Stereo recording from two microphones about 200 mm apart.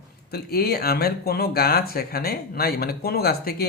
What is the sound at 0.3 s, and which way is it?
Speech, 50° left (ahead or behind).